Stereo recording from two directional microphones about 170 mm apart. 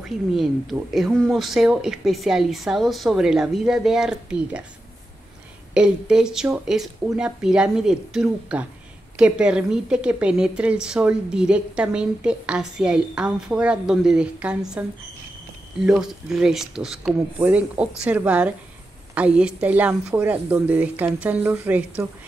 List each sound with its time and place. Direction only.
0.3 s speech: centre (ahead or behind)
5.8 s speech: 5° right (ahead or behind)
16.0 s speech: 5° right (ahead or behind)